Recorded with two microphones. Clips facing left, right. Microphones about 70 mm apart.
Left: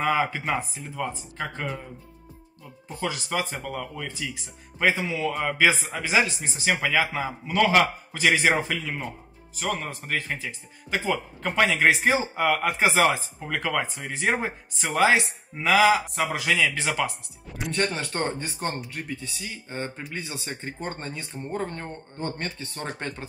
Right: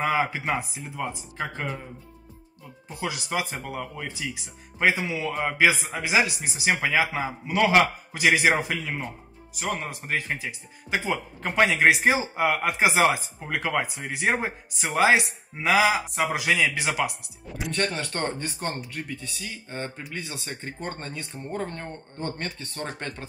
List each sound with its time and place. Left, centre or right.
0.1 s a man's voice: centre
2.9 s a man's voice: centre
17.7 s speech: centre